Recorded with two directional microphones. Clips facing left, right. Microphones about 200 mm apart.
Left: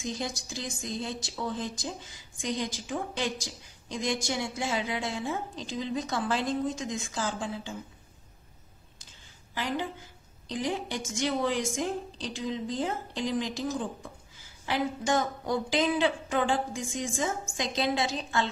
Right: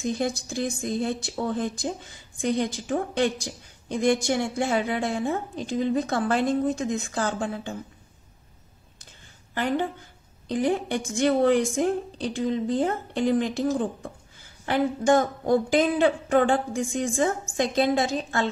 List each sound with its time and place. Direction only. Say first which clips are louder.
0.0 s a woman's voice: right 8 dB; 55° right (ahead or behind)
9.5 s a woman's voice: right 7 dB; 55° right (ahead or behind)